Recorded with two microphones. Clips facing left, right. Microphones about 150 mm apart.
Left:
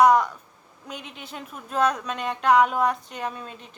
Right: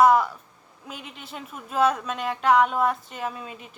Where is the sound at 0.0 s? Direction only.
5° right (ahead or behind).